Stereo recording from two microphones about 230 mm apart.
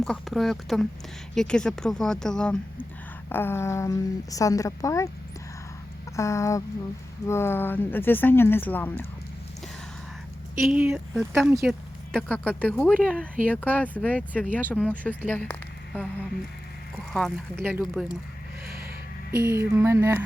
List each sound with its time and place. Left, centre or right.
0.0 s a woman's voice: centre
6.1 s a woman's voice: centre
10.6 s a woman's voice: centre
17.1 s speech: centre
18.6 s a sound: right
19.3 s speech: centre